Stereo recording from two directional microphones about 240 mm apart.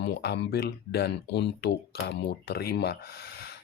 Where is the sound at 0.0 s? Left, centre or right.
Left.